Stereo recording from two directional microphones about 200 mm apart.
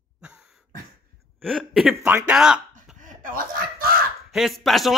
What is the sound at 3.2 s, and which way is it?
Chicken, 45° right (ahead or behind).